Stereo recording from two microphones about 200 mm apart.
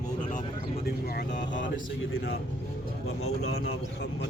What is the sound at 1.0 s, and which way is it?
Speech, 55° left (ahead or behind).